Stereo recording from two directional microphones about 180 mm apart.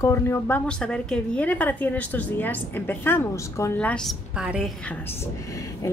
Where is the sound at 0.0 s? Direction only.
15° left (ahead or behind); by 4.7 s 5° right (ahead or behind).